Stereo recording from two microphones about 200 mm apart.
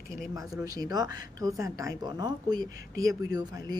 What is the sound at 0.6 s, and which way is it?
A woman's voice, 20° right (ahead or behind).